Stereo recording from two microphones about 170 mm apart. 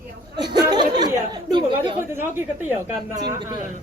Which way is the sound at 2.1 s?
15° right (ahead or behind).